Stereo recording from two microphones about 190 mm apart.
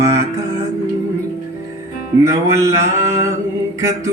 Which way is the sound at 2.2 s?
15° right (ahead or behind).